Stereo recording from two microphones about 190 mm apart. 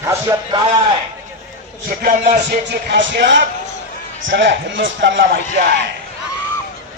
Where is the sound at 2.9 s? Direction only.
65° right (ahead or behind).